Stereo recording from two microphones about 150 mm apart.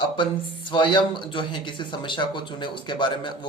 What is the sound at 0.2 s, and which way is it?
Speech, 35° left (ahead or behind).